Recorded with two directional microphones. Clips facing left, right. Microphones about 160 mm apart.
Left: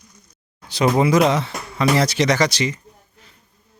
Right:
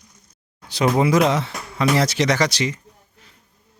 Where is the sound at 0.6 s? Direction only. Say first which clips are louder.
Left 1 dB; centre (ahead or behind).